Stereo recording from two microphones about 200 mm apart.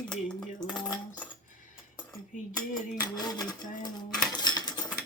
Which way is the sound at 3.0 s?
20° left (ahead or behind).